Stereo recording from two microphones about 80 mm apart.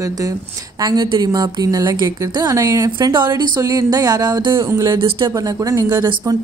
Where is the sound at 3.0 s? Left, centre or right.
Right.